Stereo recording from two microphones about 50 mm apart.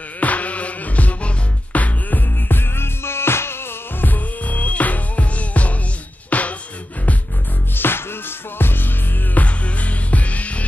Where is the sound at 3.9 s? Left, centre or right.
Left.